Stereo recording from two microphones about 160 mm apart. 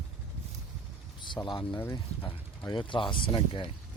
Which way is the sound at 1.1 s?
30° left (ahead or behind).